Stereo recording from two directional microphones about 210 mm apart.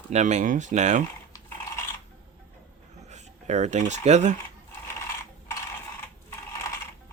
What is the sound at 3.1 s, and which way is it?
Speech, 35° right (ahead or behind).